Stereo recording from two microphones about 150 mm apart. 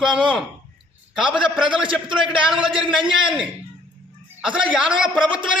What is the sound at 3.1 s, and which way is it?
Speech, 5° right (ahead or behind).